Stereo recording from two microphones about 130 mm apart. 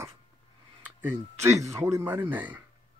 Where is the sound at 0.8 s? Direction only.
15° right (ahead or behind).